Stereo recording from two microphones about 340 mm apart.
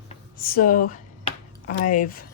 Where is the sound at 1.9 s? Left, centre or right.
Left.